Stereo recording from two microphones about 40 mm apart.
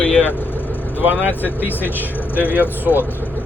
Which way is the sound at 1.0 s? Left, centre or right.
Right.